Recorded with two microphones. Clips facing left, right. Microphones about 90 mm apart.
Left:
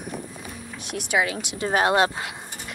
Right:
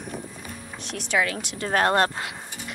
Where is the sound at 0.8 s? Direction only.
10° left (ahead or behind).